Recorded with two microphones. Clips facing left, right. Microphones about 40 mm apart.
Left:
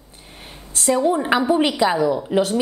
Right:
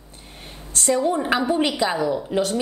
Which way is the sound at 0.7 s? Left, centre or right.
Centre.